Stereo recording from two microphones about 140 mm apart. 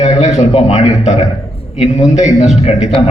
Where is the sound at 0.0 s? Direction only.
55° left (ahead or behind).